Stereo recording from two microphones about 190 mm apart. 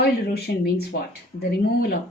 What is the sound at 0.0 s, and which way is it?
Speech, 55° left (ahead or behind).